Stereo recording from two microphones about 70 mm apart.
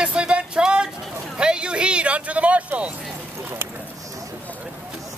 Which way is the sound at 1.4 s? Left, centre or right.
Centre.